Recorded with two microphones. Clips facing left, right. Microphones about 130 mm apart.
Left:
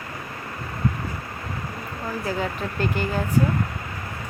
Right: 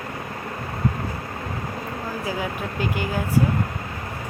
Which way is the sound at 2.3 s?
10° right (ahead or behind).